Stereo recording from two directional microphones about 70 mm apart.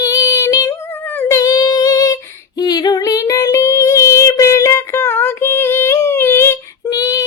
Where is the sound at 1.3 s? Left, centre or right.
Left.